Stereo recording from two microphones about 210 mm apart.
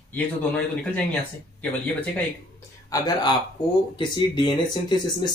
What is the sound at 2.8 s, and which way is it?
Speech, 15° left (ahead or behind).